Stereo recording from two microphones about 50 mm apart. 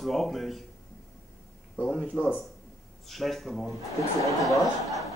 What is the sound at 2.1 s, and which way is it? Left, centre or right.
Speech, left.